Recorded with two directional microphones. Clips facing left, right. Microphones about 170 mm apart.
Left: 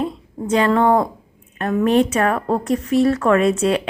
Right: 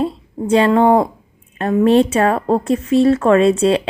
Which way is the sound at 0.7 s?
20° right (ahead or behind).